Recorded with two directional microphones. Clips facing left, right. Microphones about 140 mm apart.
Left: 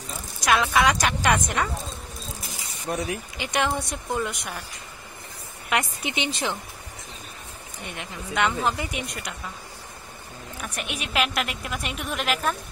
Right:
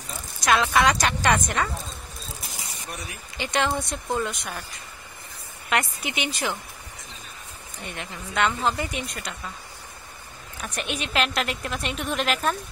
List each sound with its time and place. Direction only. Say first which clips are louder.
0.5 s speech: even; 5° left (ahead or behind)
2.9 s speech: left 11 dB; 90° left
3.3 s a woman's voice: right 2 dB; 15° left (ahead or behind)
5.7 s a woman's voice: even; 20° left (ahead or behind)
7.8 s a woman's voice: even; 15° left (ahead or behind)
10.6 s a woman's voice: right 3 dB; 5° left (ahead or behind)